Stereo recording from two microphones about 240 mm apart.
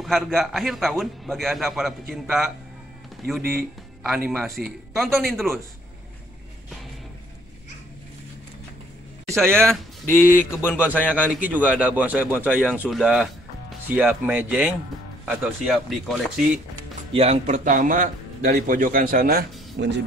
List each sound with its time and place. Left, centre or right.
0.0 s a man's voice: centre
9.5 s speech: centre
10.0 s a man's voice: centre
11.3 s a man's voice: centre
17.1 s a man's voice: right